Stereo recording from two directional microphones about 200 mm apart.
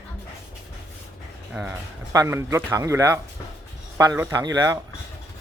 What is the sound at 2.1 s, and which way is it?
Speech, 15° right (ahead or behind).